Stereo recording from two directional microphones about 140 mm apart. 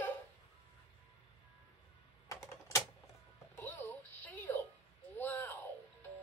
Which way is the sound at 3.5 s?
15° left (ahead or behind).